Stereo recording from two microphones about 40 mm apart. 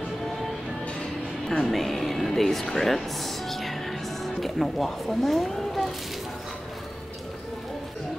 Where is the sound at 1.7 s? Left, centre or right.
Centre.